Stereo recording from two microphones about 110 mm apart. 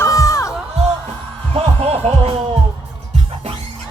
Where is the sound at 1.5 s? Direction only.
65° right (ahead or behind).